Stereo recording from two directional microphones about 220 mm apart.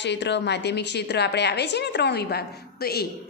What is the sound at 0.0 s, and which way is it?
Speech, 50° left (ahead or behind).